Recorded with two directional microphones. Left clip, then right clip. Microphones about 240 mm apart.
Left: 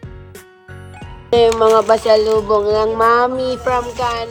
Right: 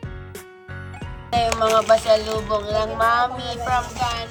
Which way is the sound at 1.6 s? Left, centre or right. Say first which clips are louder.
Left 5 dB; left.